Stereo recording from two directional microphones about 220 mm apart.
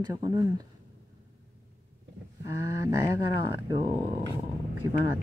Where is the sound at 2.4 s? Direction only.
15° right (ahead or behind).